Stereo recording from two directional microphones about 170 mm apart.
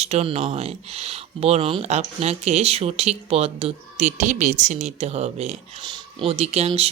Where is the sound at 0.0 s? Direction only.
40° right (ahead or behind).